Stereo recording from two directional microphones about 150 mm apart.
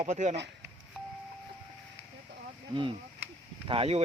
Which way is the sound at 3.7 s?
40° right (ahead or behind).